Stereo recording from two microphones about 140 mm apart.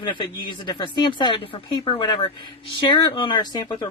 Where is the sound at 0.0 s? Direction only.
30° left (ahead or behind).